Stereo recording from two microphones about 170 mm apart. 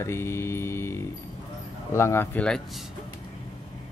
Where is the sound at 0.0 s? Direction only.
15° left (ahead or behind).